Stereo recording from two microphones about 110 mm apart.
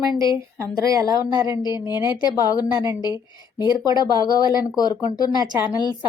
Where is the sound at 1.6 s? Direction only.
40° left (ahead or behind).